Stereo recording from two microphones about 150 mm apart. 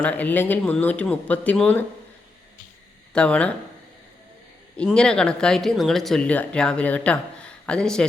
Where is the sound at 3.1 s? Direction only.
5° left (ahead or behind).